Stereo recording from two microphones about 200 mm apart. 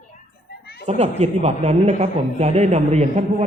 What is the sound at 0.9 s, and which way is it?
Speech, 35° right (ahead or behind).